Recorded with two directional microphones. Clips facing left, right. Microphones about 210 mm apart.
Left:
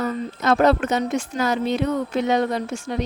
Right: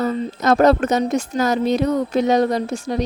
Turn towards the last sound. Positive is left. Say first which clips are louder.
# right 4 dB
turn(degrees=-35)  # may be behind; listen again after turning